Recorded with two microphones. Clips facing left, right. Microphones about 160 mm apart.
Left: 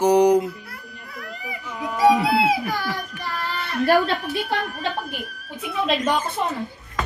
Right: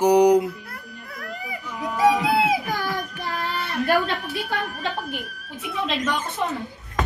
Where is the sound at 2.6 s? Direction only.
Centre (ahead or behind).